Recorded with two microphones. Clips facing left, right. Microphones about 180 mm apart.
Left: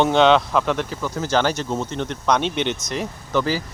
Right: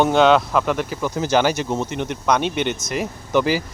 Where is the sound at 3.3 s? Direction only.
15° right (ahead or behind).